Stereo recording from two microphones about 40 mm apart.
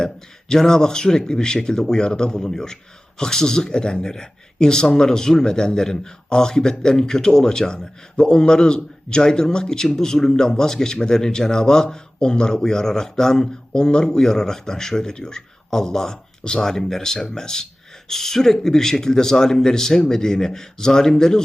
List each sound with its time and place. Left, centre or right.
0.0 s a man's voice: centre